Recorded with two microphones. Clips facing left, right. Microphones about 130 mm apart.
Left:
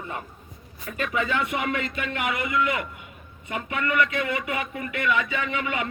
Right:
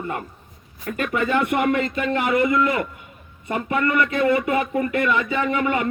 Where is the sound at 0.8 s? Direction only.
55° right (ahead or behind).